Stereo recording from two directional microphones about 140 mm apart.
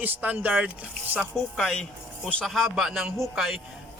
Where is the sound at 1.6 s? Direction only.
5° left (ahead or behind).